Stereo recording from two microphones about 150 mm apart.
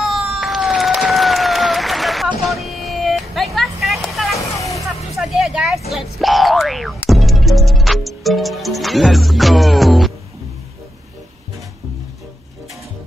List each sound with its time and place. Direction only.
0.0 s a sound: centre (ahead or behind)
4.6 s music: 20° left (ahead or behind)
5.1 s boing: centre (ahead or behind)